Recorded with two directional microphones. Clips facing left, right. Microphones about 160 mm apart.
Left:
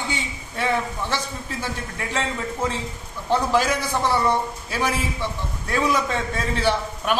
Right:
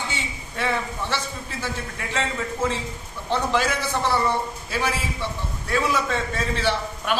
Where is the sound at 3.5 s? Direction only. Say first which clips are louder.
Left 2 dB; 10° left (ahead or behind).